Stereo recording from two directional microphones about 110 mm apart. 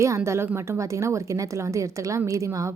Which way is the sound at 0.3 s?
25° right (ahead or behind).